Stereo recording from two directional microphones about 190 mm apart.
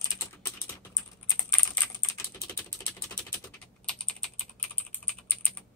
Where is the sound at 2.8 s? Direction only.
20° left (ahead or behind).